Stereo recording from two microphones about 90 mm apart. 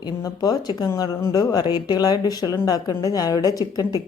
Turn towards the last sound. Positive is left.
turn(degrees=40)  # may be behind; listen again after turning